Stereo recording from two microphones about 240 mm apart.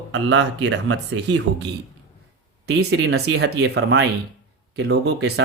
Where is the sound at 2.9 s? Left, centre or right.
Right.